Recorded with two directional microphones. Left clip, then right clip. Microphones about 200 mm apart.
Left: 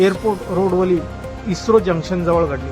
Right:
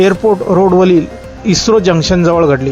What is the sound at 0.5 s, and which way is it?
Speech, 40° right (ahead or behind).